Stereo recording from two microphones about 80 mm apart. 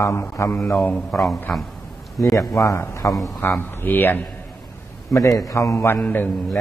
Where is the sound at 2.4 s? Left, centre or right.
Left.